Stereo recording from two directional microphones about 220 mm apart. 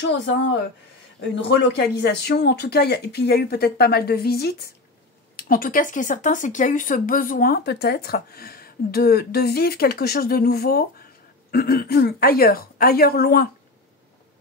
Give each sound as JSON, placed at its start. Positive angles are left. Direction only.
{"t": 1.3, "sound": "speech", "side_deg": 55}